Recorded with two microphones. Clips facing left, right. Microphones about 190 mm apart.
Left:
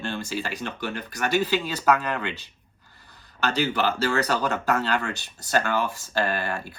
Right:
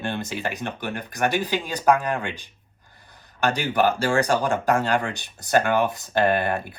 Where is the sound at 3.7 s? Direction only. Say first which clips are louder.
Right 4 dB; 50° right (ahead or behind).